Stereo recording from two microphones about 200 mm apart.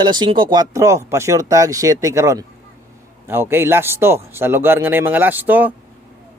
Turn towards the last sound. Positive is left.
turn(degrees=-10)  # may be behind; listen again after turning